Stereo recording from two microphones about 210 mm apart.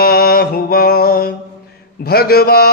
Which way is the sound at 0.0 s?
45° left (ahead or behind).